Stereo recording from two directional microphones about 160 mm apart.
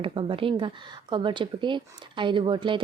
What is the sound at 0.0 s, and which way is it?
Speech, 35° right (ahead or behind).